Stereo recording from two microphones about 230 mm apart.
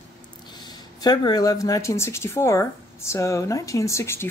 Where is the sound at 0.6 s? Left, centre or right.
Centre.